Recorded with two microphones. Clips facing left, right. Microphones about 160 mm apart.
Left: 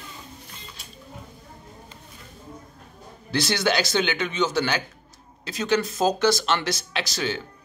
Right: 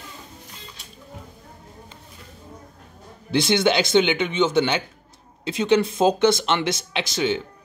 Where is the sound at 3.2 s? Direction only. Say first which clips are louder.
Right 4 dB; 20° right (ahead or behind).